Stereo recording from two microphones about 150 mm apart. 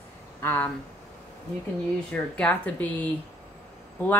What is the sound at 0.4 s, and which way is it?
Speech, 15° left (ahead or behind).